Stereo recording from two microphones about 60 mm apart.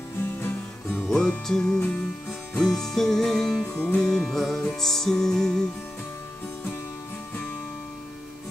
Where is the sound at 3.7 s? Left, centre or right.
Left.